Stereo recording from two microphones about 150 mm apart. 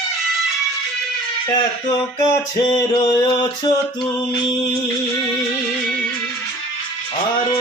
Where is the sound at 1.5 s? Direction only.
30° left (ahead or behind).